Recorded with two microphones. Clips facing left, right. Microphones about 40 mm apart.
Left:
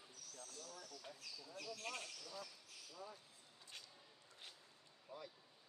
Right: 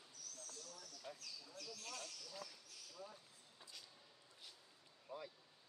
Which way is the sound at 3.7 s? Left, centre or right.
Left.